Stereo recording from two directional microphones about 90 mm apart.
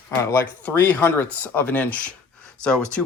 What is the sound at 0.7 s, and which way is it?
Speech, 20° left (ahead or behind).